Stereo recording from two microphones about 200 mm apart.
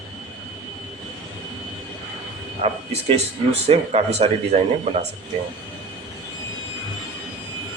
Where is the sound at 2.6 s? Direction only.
30° right (ahead or behind).